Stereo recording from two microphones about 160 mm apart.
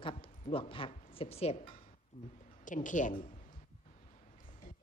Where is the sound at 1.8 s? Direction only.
45° left (ahead or behind).